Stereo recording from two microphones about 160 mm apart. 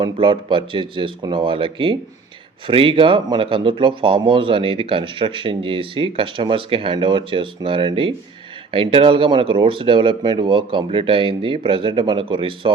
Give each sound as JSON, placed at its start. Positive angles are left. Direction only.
{"t": 0.0, "sound": "speech", "side_deg": -30}